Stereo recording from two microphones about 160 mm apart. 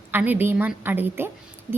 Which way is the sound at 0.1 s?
10° right (ahead or behind).